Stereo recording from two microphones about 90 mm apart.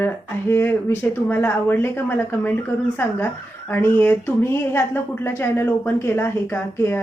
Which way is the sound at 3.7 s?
20° left (ahead or behind).